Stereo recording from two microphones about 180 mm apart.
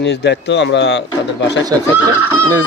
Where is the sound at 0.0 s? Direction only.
70° left (ahead or behind).